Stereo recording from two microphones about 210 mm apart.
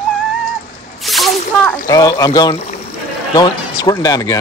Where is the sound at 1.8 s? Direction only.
15° left (ahead or behind).